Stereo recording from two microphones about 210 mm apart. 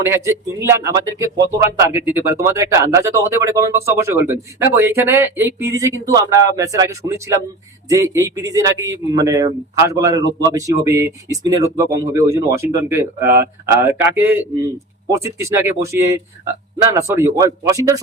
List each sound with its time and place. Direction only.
0.1 s speech: 10° right (ahead or behind)